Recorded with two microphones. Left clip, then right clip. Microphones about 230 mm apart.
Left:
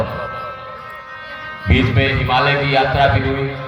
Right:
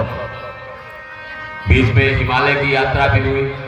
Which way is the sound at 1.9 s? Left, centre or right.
Centre.